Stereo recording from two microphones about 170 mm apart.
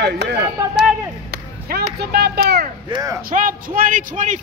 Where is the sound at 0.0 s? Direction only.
80° right.